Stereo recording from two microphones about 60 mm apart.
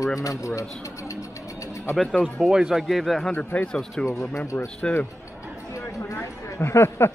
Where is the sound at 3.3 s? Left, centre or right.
Left.